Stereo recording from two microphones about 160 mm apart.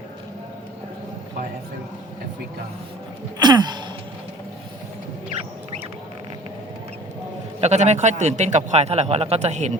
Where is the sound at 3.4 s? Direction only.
25° right (ahead or behind).